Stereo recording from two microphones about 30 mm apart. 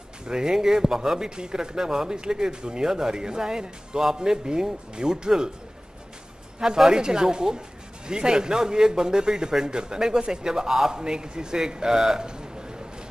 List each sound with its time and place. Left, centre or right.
0.3 s speech: right
6.9 s speech: right